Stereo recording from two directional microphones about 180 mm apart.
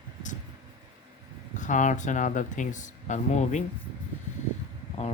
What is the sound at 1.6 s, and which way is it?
Speech, 45° left (ahead or behind).